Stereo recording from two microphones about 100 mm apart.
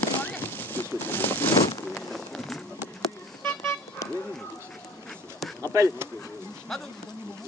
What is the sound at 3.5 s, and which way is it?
Vehicle, 25° left (ahead or behind).